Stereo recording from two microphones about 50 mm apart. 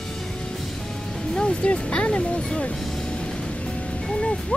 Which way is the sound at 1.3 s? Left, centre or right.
Centre.